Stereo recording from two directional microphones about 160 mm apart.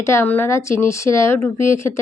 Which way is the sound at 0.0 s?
15° left (ahead or behind).